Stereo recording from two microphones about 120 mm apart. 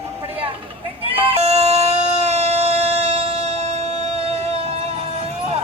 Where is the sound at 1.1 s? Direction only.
55° right (ahead or behind).